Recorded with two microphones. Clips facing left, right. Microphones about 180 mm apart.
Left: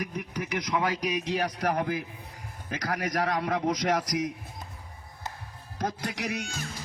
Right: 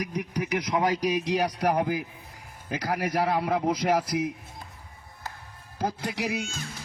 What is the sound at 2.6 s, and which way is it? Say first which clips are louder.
A man's voice: right 3 dB; 10° right (ahead or behind).